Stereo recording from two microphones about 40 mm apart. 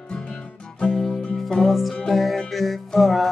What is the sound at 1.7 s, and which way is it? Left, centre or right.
Music, centre.